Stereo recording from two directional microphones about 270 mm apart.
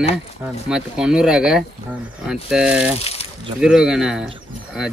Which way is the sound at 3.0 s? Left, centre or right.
Left.